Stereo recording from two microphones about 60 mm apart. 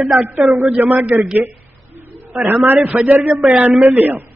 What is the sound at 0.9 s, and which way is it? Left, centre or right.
Speech, right.